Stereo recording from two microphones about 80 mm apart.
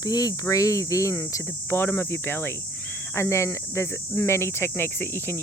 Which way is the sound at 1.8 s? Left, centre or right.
Left.